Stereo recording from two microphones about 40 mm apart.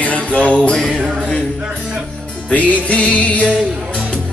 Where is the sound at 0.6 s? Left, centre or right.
Left.